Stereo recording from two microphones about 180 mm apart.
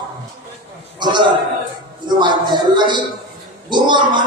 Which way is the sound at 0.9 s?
25° right (ahead or behind).